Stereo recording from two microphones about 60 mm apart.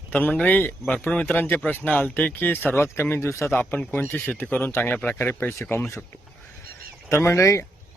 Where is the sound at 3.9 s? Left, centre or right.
Left.